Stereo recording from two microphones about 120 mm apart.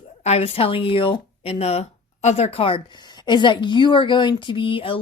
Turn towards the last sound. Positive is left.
turn(degrees=50)  # may be behind; listen again after turning